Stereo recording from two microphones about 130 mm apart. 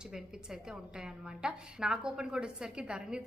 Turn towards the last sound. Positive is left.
turn(degrees=-5)  # may be behind; listen again after turning